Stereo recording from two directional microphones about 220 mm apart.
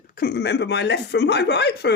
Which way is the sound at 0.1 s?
45° left (ahead or behind).